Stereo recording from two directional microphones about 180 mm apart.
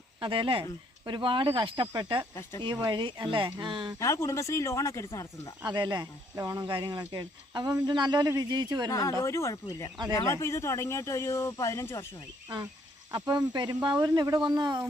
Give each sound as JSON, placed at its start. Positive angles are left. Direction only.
{"t": 0.2, "sound": "speech", "side_deg": -30}
{"t": 4.0, "sound": "speech", "side_deg": 15}
{"t": 5.6, "sound": "speech", "side_deg": -25}
{"t": 8.9, "sound": "speech", "side_deg": 20}
{"t": 13.1, "sound": "speech", "side_deg": -20}